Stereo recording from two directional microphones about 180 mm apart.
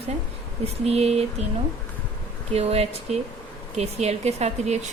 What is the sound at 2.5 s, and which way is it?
A woman's voice, 35° right (ahead or behind).